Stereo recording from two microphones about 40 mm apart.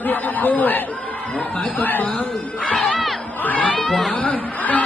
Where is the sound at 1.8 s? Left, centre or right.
Left.